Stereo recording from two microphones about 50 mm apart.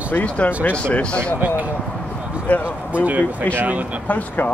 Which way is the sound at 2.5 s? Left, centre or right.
Left.